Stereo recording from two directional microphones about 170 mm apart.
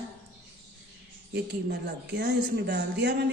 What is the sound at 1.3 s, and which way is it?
Speech, 65° right (ahead or behind).